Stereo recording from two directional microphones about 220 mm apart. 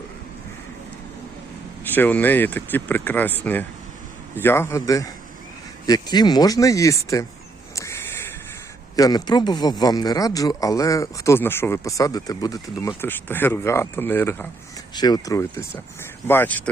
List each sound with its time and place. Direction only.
1.8 s speech: 10° left (ahead or behind)
9.0 s speech: 15° left (ahead or behind)